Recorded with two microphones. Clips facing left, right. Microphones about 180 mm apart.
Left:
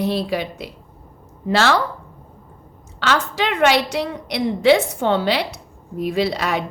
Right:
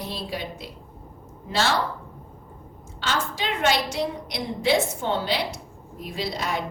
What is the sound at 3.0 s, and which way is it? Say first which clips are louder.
A woman's voice: left 7 dB; 70° left (ahead or behind).